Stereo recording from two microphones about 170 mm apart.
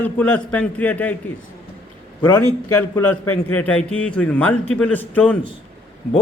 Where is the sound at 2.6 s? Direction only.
15° left (ahead or behind).